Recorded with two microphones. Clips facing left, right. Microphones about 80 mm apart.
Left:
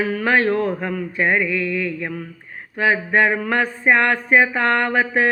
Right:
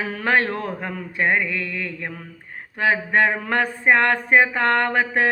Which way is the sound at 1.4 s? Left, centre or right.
Right.